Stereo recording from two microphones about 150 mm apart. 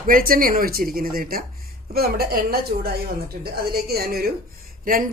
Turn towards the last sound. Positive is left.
turn(degrees=-65)  # may be behind; listen again after turning